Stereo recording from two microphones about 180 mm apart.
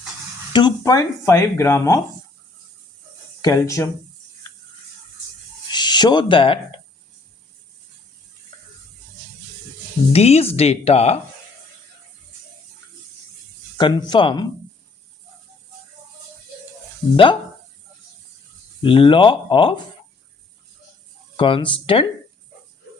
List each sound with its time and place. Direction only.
0.5 s speech: 20° left (ahead or behind)
3.4 s speech: 15° left (ahead or behind)
5.7 s speech: 25° left (ahead or behind)
10.1 s speech: 35° left (ahead or behind)
13.7 s speech: 25° left (ahead or behind)
18.8 s speech: 30° left (ahead or behind)
21.3 s speech: 30° left (ahead or behind)